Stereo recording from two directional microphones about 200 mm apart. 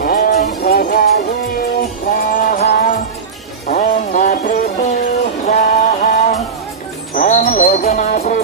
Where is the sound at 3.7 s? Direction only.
35° left (ahead or behind).